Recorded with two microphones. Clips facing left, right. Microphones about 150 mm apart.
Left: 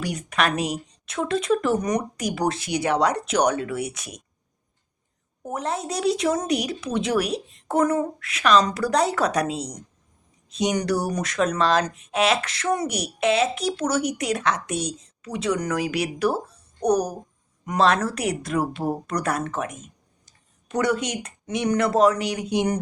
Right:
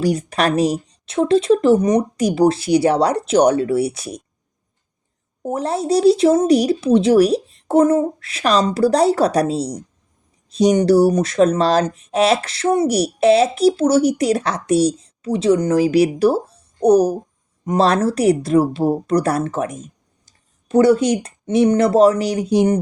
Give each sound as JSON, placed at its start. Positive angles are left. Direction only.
{"t": 0.0, "sound": "speech", "side_deg": -30}
{"t": 5.5, "sound": "speech", "side_deg": -35}